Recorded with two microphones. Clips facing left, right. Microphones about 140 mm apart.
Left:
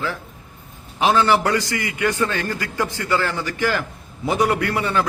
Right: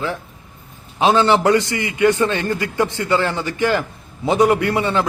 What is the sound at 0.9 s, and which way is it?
A man's voice, 20° right (ahead or behind).